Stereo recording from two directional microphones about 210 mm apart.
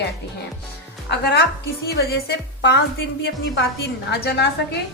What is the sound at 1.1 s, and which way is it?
A woman's voice, 50° left (ahead or behind).